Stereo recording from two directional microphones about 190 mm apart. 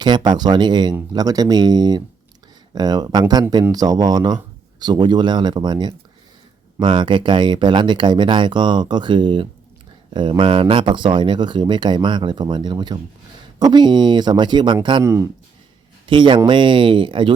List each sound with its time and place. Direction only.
0.0 s speech: 25° right (ahead or behind)
16.0 s speech: 25° right (ahead or behind)